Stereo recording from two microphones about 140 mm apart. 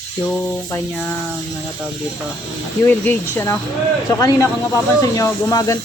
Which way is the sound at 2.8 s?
15° left (ahead or behind).